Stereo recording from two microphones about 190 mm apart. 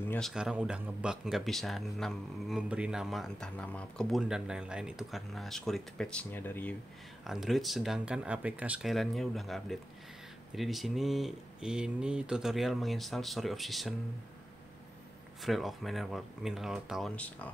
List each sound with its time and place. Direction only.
0.0 s speech: 10° left (ahead or behind)
0.3 s speech: 5° right (ahead or behind)
7.2 s speech: centre (ahead or behind)
15.4 s speech: centre (ahead or behind)